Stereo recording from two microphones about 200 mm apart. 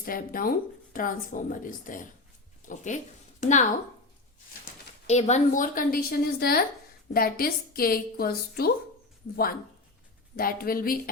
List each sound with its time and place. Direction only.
0.0 s a woman's voice: 45° left (ahead or behind)
5.0 s a woman's voice: 35° left (ahead or behind)